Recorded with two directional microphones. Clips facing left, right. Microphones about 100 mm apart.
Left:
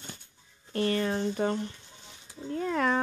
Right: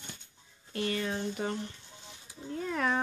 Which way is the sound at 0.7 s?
45° left (ahead or behind).